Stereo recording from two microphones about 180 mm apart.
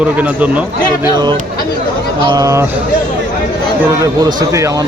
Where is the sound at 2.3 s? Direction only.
20° right (ahead or behind).